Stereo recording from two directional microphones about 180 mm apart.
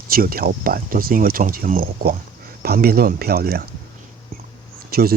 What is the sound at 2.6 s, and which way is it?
Speech, 55° right (ahead or behind).